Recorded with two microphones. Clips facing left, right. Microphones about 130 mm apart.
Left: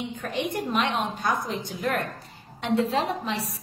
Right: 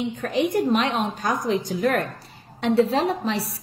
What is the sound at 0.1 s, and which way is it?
A woman's voice, 40° right (ahead or behind).